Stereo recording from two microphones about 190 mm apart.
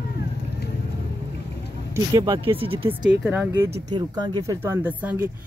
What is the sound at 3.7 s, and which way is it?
Speech, 25° right (ahead or behind).